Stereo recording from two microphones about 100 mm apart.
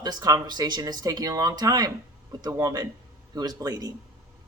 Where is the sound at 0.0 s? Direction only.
40° right (ahead or behind).